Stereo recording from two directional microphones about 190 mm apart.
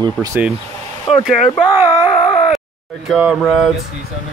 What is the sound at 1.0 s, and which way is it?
Speech, centre (ahead or behind).